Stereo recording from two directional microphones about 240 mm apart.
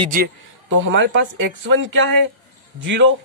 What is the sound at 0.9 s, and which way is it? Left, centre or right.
Speech, right.